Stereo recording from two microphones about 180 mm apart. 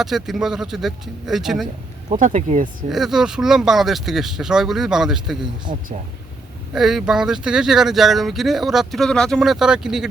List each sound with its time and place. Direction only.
0.0 s speech: centre (ahead or behind)
2.0 s speech: 45° right (ahead or behind)
2.9 s speech: centre (ahead or behind)
6.7 s speech: centre (ahead or behind)